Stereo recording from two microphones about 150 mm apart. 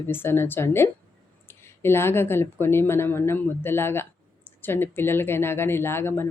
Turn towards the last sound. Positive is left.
turn(degrees=15)  # may be behind; listen again after turning